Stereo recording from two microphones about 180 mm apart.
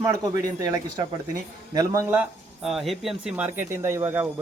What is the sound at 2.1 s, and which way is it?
Speech, 5° right (ahead or behind).